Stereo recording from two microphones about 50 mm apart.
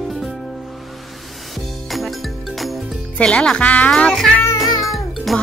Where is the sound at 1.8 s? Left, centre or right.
Centre.